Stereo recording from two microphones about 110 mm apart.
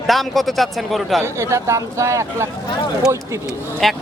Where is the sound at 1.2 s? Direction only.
25° right (ahead or behind).